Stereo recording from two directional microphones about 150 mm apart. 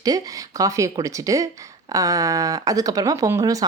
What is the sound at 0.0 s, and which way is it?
Speech, 25° right (ahead or behind).